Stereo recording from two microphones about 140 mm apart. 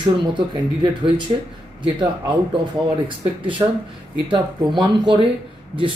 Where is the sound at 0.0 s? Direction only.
35° right (ahead or behind).